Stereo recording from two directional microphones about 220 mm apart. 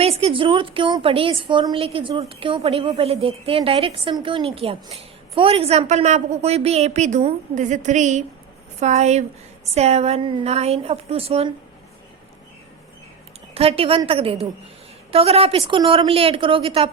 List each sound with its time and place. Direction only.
0.0 s a woman's voice: 25° right (ahead or behind)
13.5 s a woman's voice: 25° right (ahead or behind)